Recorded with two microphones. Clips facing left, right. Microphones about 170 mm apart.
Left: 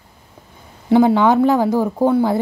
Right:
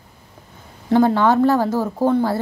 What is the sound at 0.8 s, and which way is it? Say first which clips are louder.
Speech: left 2 dB; 15° left (ahead or behind).